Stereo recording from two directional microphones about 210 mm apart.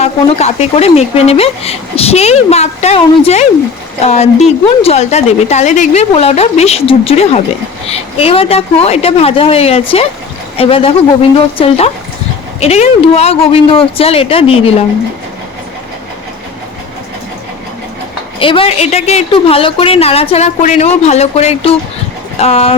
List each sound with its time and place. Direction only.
0.0 s a woman's voice: 30° left (ahead or behind)
18.3 s speech: 25° left (ahead or behind)